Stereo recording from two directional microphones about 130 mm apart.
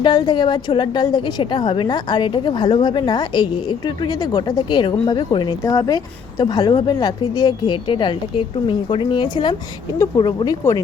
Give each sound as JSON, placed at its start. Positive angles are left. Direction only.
{"t": 0.0, "sound": "a woman's voice", "side_deg": 35}